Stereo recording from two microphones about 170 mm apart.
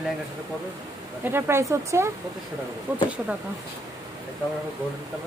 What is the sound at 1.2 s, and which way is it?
Speech, 15° right (ahead or behind).